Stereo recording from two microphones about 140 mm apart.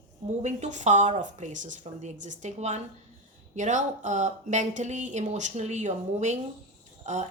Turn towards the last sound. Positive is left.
turn(degrees=-55)  # may be behind; listen again after turning